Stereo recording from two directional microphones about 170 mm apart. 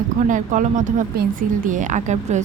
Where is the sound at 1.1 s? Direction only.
60° right (ahead or behind).